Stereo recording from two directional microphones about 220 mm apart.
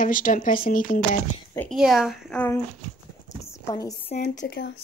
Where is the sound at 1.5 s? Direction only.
Centre (ahead or behind).